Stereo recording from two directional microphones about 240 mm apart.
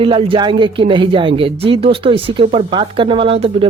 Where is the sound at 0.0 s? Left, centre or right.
Right.